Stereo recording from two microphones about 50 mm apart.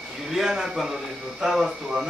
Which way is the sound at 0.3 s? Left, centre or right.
Centre.